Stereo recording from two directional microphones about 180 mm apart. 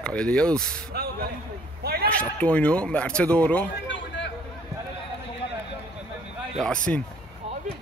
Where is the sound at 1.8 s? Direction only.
60° right (ahead or behind).